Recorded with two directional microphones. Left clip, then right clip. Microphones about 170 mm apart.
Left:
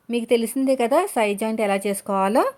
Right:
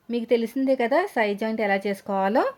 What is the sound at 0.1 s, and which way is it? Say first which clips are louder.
A woman's voice: left 2 dB; 25° left (ahead or behind).